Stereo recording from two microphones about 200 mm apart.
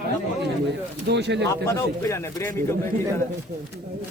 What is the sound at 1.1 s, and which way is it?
Speech, 60° right (ahead or behind).